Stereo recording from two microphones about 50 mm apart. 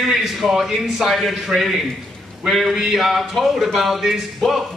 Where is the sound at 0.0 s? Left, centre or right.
Centre.